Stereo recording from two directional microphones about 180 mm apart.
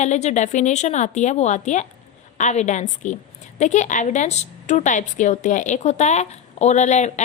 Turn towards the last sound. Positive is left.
turn(degrees=40)  # may be behind; listen again after turning